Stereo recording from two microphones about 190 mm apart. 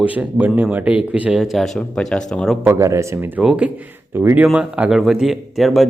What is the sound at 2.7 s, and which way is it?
A man's voice, 15° right (ahead or behind).